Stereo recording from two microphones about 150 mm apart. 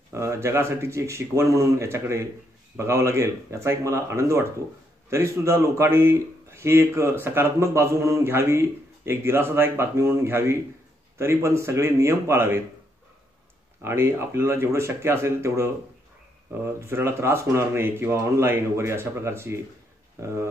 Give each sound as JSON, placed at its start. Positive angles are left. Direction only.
{"t": 0.1, "sound": "speech", "side_deg": -20}
{"t": 13.8, "sound": "speech", "side_deg": -15}